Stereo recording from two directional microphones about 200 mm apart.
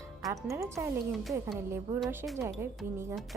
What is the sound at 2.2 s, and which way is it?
Speech, 10° right (ahead or behind).